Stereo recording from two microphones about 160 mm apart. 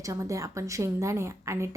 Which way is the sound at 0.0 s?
20° right (ahead or behind).